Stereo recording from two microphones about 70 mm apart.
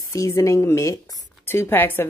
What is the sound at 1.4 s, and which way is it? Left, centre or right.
Speech, left.